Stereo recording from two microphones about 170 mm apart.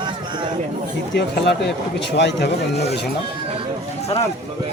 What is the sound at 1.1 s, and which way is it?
Speech, 90° left.